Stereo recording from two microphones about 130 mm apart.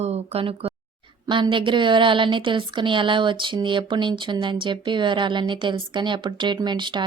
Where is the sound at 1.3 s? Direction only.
40° right (ahead or behind).